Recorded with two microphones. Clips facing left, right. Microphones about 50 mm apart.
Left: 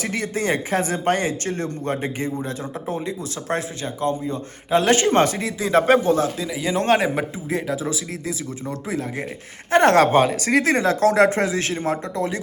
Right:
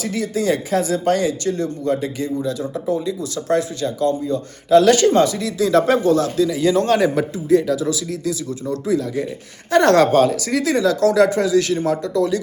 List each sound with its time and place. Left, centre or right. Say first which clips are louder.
0.0 s speech: right 3 dB; left; by 6.7 s centre
6.7 s speech: left 1 dB; left